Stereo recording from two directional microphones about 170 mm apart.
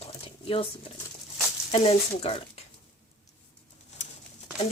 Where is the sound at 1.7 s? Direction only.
35° left (ahead or behind).